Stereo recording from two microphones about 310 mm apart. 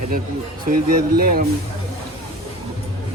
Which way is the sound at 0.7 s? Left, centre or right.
Right.